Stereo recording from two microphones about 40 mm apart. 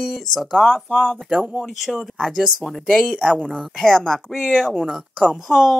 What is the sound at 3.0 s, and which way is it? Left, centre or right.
Speech, right.